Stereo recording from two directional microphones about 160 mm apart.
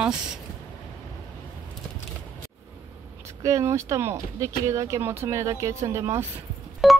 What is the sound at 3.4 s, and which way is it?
Speech, 20° right (ahead or behind).